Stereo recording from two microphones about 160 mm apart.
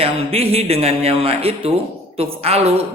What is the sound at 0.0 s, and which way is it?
Speech, 40° right (ahead or behind).